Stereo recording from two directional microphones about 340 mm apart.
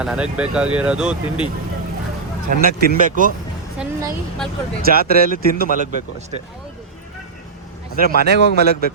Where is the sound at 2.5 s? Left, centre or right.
Right.